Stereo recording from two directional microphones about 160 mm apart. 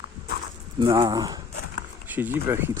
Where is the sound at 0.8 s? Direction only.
30° right (ahead or behind).